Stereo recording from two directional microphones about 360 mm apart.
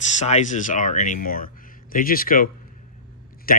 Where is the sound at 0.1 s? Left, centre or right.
Centre.